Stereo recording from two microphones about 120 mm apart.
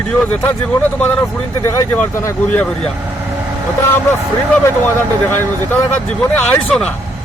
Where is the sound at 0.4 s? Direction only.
15° left (ahead or behind).